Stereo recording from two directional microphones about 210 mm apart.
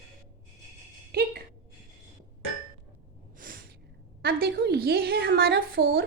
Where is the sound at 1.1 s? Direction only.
50° right (ahead or behind).